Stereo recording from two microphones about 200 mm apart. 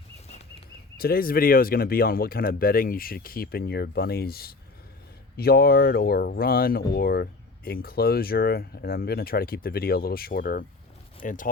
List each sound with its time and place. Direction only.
0.9 s speech: 50° left (ahead or behind)